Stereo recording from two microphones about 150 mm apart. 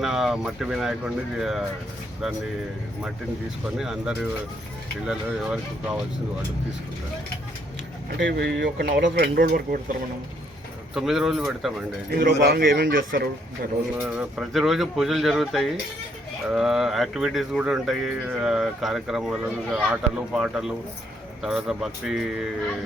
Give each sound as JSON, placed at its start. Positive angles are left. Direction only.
{"t": 0.0, "sound": "speech", "side_deg": -5}
{"t": 3.8, "sound": "speech", "side_deg": -5}
{"t": 8.4, "sound": "speech", "side_deg": -90}
{"t": 10.9, "sound": "speech", "side_deg": 0}
{"t": 12.1, "sound": "a man's voice", "side_deg": -80}
{"t": 14.0, "sound": "speech", "side_deg": -5}